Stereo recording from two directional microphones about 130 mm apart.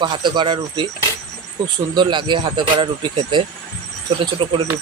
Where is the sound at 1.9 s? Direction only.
35° right (ahead or behind).